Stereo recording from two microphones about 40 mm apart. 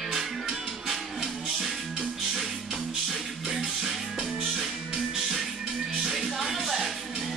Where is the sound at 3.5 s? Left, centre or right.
Centre.